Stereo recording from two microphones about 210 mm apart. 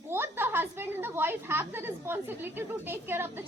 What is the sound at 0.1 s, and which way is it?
A woman's voice, 10° right (ahead or behind).